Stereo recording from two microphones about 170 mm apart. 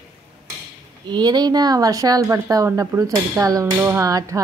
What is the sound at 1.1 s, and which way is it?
Speech, 25° right (ahead or behind).